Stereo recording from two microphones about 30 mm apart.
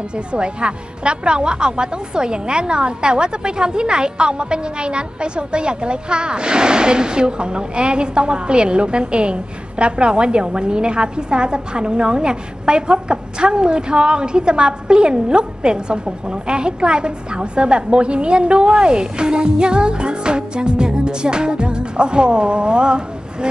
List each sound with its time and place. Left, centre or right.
0.1 s a woman's voice: right